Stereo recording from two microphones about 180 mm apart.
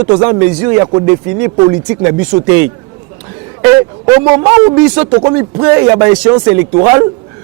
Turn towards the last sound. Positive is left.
turn(degrees=-20)  # may be behind; listen again after turning